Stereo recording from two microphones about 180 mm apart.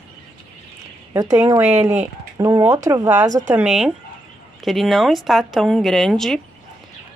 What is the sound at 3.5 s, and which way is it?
Speech, 5° right (ahead or behind).